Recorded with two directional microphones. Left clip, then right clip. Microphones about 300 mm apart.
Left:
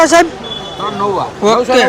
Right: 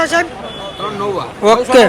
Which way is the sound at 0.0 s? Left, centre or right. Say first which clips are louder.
Left 6 dB; left.